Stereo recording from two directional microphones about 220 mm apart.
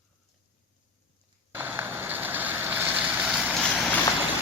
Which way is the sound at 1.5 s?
10° right (ahead or behind).